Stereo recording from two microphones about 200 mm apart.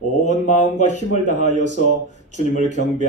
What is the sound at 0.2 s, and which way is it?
Speech, 35° left (ahead or behind).